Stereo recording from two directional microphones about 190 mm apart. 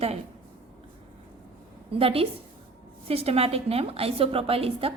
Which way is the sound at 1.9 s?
30° right (ahead or behind).